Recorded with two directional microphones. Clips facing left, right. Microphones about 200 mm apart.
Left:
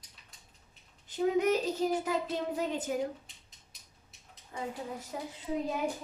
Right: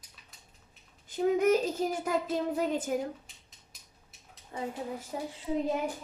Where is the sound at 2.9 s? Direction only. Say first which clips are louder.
Right 1 dB; 50° right (ahead or behind).